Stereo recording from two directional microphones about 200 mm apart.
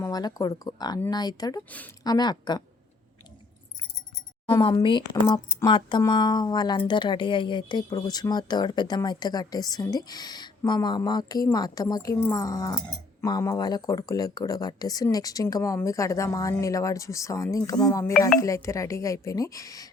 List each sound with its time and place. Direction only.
0.0 s speech: 20° left (ahead or behind)
4.5 s speech: 20° left (ahead or behind)